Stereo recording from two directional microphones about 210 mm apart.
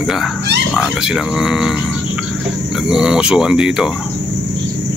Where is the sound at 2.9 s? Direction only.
5° right (ahead or behind).